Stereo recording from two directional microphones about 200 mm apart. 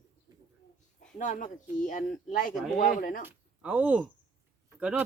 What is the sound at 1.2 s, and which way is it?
Speech, 40° left (ahead or behind).